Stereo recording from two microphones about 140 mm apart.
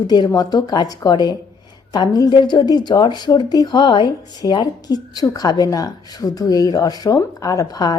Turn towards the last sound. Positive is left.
turn(degrees=25)  # may be behind; listen again after turning